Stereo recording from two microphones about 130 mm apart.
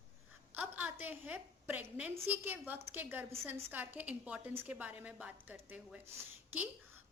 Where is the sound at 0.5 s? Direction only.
15° right (ahead or behind).